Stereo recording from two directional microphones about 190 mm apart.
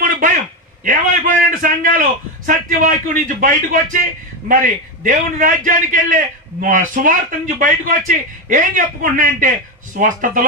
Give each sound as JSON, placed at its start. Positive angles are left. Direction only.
{"t": 0.8, "sound": "a man's voice", "side_deg": -45}